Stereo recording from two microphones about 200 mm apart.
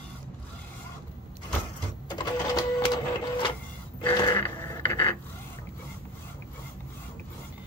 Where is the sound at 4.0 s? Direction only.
20° left (ahead or behind).